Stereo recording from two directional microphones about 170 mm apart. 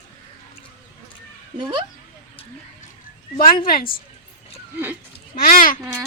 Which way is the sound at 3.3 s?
55° left (ahead or behind).